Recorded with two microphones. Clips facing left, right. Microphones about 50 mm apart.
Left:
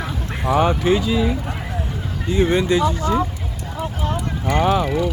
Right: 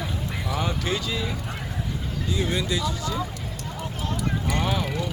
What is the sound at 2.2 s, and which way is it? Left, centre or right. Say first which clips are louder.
Speech: left 10 dB; left.